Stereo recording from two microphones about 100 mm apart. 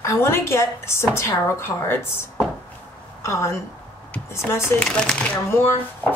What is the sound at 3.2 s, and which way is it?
Speech, 30° left (ahead or behind).